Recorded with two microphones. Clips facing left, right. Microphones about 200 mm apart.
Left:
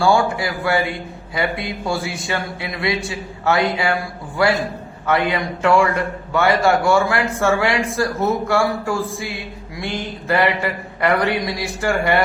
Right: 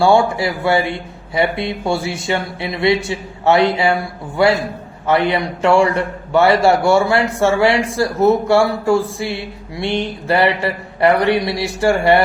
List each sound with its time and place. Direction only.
0.0 s a man's voice: 25° right (ahead or behind)
5.0 s a man's voice: 30° right (ahead or behind)